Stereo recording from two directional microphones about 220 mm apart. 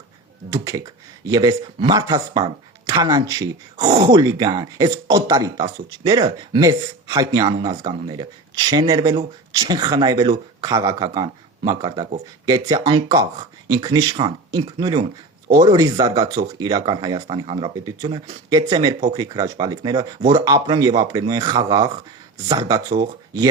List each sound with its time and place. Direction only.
0.5 s speech: 15° right (ahead or behind)